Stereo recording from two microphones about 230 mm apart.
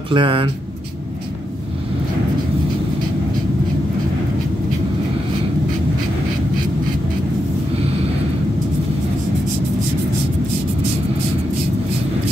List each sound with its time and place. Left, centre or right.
0.1 s speech: right